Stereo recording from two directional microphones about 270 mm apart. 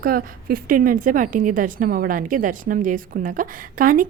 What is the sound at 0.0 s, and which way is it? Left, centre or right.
A woman's voice, right.